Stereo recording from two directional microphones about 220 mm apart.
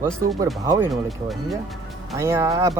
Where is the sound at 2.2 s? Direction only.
10° right (ahead or behind).